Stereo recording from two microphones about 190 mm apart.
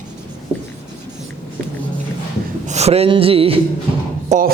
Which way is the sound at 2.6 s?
35° right (ahead or behind).